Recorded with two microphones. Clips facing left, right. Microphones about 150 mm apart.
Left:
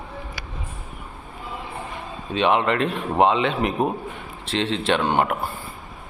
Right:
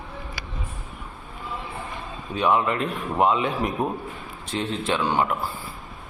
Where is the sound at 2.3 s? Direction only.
80° left.